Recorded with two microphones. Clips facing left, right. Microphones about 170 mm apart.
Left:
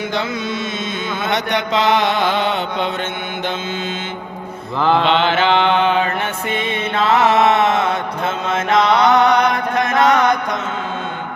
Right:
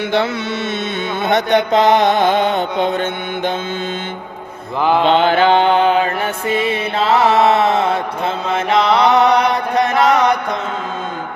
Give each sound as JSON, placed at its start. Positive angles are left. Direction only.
{"t": 1.5, "sound": "mantra", "side_deg": -55}
{"t": 2.4, "sound": "mantra", "side_deg": -45}
{"t": 4.8, "sound": "mantra", "side_deg": -15}
{"t": 5.0, "sound": "mantra", "side_deg": -45}
{"t": 10.0, "sound": "chant", "side_deg": -30}